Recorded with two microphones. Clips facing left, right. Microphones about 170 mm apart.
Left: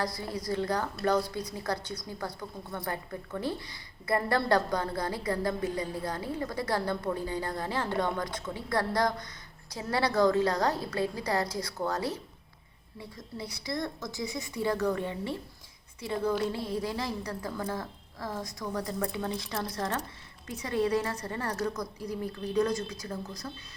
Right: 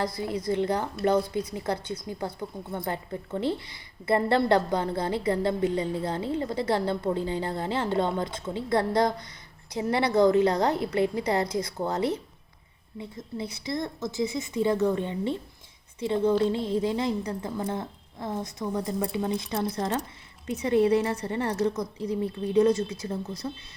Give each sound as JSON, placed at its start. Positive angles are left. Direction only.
{"t": 0.0, "sound": "speech", "side_deg": -20}